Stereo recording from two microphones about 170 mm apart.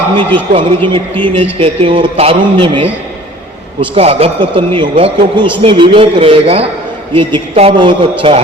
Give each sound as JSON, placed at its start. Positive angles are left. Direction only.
{"t": 0.2, "sound": "a man's voice", "side_deg": -30}